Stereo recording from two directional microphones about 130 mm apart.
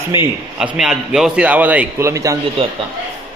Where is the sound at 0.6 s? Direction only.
5° right (ahead or behind); by 2.4 s 25° right (ahead or behind).